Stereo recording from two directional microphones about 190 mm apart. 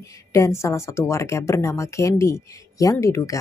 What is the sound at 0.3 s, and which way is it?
Speech, 15° left (ahead or behind).